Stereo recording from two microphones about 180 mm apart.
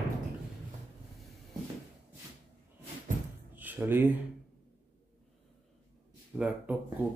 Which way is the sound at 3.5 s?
10° right (ahead or behind).